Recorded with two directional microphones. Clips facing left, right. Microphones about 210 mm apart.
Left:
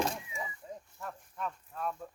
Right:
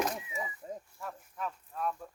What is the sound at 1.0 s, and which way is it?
Speech, centre (ahead or behind).